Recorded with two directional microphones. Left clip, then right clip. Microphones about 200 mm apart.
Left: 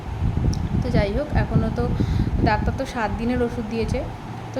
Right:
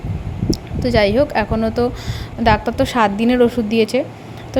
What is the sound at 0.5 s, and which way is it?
A woman's voice, 40° right (ahead or behind).